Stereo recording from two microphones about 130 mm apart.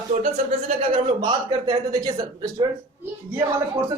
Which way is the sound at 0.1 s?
65° right (ahead or behind).